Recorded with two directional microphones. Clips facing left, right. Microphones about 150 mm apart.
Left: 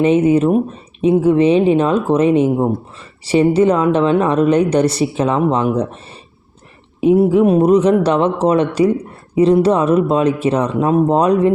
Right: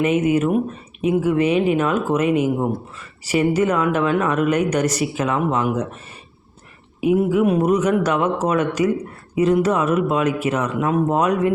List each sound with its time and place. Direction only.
0.0 s speech: 30° left (ahead or behind)
7.0 s speech: 30° left (ahead or behind)